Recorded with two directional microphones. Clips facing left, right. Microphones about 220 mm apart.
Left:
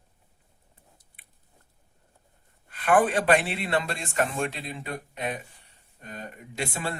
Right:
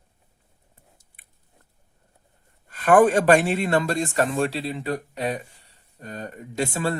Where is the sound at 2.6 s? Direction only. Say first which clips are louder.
Right 6 dB; 45° right (ahead or behind).